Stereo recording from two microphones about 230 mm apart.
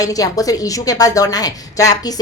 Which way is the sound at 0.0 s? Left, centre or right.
Centre.